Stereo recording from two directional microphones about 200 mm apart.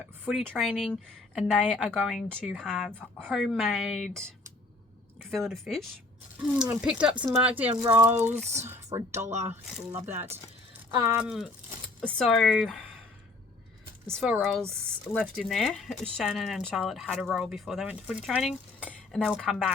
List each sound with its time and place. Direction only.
0.3 s speech: centre (ahead or behind)
5.3 s speech: centre (ahead or behind)
9.3 s speech: 35° right (ahead or behind)
9.9 s speech: 10° right (ahead or behind)
14.1 s speech: centre (ahead or behind)